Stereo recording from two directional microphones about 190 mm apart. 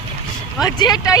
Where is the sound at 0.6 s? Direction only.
20° left (ahead or behind).